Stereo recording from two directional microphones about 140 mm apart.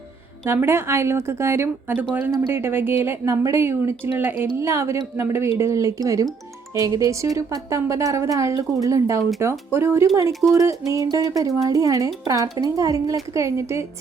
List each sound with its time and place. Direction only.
0.4 s a woman's voice: 15° right (ahead or behind)